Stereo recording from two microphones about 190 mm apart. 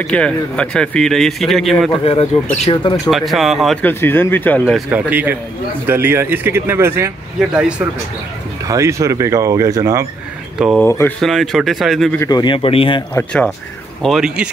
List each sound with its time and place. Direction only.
0.0 s speech: 5° left (ahead or behind)
1.9 s speech: 30° left (ahead or behind)
3.1 s speech: centre (ahead or behind)
8.6 s speech: 15° right (ahead or behind)
10.8 s speech: 10° left (ahead or behind)
11.1 s speech: centre (ahead or behind)
12.2 s speech: 20° left (ahead or behind)
13.1 s speech: 5° left (ahead or behind)